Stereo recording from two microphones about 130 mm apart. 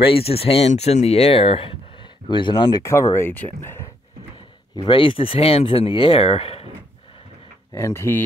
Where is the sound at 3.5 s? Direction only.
20° left (ahead or behind).